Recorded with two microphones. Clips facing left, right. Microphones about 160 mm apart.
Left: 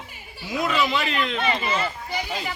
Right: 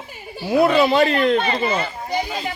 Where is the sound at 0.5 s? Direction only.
35° right (ahead or behind).